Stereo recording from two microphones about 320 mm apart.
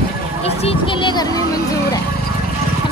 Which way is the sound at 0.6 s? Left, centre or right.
Centre.